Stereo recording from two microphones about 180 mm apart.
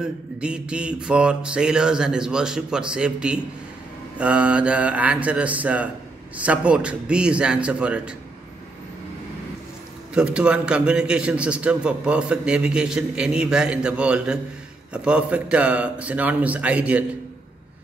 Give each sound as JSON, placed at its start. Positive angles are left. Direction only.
{"t": 0.0, "sound": "a man's voice", "side_deg": -5}
{"t": 10.1, "sound": "a man's voice", "side_deg": -5}